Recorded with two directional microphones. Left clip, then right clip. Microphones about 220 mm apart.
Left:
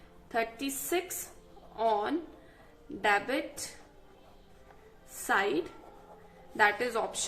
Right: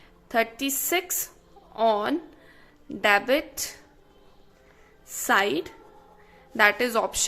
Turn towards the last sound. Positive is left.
turn(degrees=-45)  # may be behind; listen again after turning